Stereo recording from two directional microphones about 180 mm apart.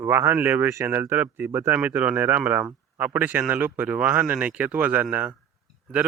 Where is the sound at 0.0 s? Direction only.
15° right (ahead or behind).